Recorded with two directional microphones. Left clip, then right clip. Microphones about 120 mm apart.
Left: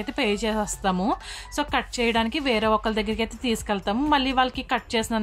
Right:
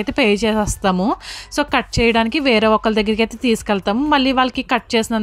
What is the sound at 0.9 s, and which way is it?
Speech, 25° right (ahead or behind).